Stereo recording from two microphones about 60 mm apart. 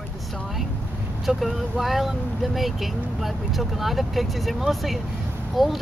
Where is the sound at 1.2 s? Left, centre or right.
Centre.